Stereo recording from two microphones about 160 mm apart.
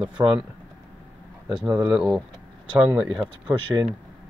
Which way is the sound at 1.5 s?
5° right (ahead or behind).